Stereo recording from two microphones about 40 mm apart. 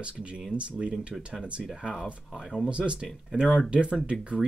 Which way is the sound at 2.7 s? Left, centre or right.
Right.